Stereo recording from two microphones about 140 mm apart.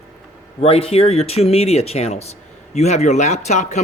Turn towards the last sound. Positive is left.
turn(degrees=55)  # may be behind; listen again after turning